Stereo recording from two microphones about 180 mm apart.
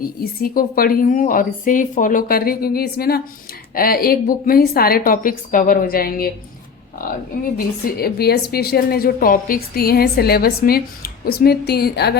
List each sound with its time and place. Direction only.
0.0 s a woman's voice: 55° left (ahead or behind)
7.9 s a woman's voice: 60° left (ahead or behind)